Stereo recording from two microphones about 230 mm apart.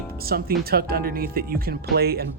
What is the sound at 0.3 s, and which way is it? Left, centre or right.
Speech, right.